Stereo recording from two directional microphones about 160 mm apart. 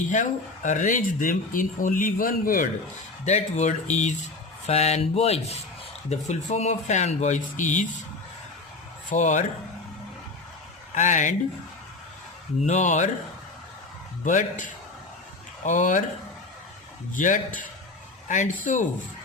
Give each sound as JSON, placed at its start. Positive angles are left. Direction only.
{"t": 0.1, "sound": "speech", "side_deg": 50}
{"t": 3.2, "sound": "speech", "side_deg": 45}
{"t": 4.6, "sound": "a sound", "side_deg": 40}
{"t": 6.1, "sound": "speech", "side_deg": 45}
{"t": 9.0, "sound": "speech", "side_deg": 50}
{"t": 10.9, "sound": "speech", "side_deg": 50}
{"t": 12.6, "sound": "speech", "side_deg": 50}
{"t": 14.3, "sound": "speech", "side_deg": 55}
{"t": 15.6, "sound": "speech", "side_deg": 50}
{"t": 17.2, "sound": "speech", "side_deg": 55}